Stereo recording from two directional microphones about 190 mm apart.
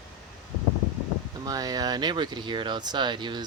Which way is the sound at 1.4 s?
20° right (ahead or behind).